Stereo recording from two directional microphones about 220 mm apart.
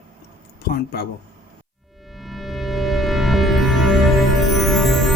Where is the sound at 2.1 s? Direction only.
Centre (ahead or behind).